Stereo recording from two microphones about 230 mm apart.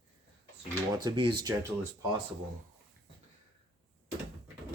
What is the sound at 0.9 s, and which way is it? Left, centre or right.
Speech, centre.